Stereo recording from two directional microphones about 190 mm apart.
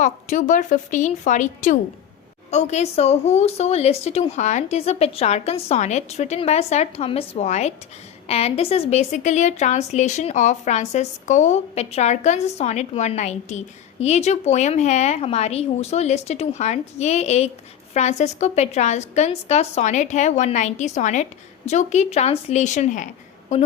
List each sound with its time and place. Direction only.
0.0 s speech: 40° left (ahead or behind)